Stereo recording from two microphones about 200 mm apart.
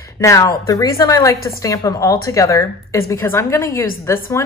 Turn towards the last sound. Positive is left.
turn(degrees=15)  # may be behind; listen again after turning